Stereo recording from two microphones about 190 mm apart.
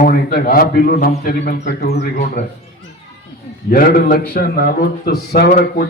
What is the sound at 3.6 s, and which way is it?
A man's voice, 50° left (ahead or behind).